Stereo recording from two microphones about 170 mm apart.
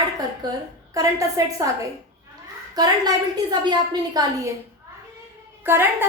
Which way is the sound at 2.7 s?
25° right (ahead or behind).